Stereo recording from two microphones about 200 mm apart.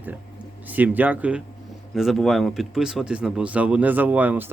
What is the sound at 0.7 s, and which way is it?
Speech, 10° right (ahead or behind).